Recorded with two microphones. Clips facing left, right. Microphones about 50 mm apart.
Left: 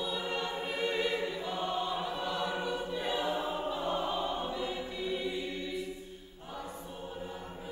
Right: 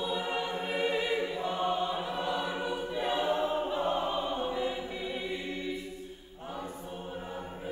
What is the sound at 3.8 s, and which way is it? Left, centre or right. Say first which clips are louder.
Opera: right 1 dB; right.